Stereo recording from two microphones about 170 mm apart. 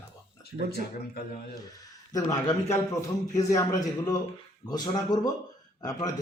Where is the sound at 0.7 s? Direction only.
65° left (ahead or behind).